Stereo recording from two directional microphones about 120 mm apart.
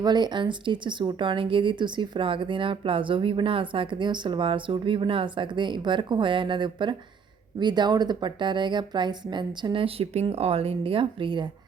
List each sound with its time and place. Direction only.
0.0 s a woman's voice: 35° right (ahead or behind)